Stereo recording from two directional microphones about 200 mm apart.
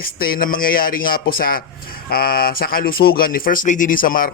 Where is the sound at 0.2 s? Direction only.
45° left (ahead or behind).